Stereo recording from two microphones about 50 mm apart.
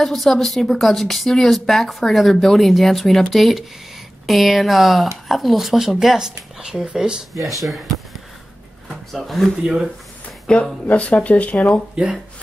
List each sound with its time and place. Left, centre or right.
0.0 s speech: centre
8.8 s speech: centre
9.6 s speech: centre
10.4 s speech: left
11.9 s speech: centre